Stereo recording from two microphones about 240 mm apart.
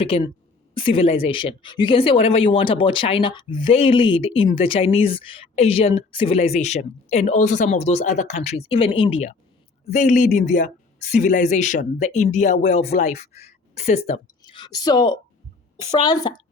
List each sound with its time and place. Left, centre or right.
0.0 s a woman's voice: left